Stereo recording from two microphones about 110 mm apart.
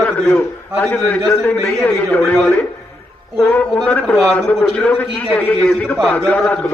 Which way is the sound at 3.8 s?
10° left (ahead or behind).